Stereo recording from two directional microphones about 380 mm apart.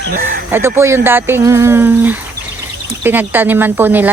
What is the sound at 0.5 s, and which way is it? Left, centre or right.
Speech, centre.